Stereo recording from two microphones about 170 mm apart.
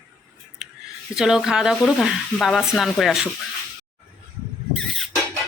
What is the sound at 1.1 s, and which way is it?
Speech, 5° right (ahead or behind).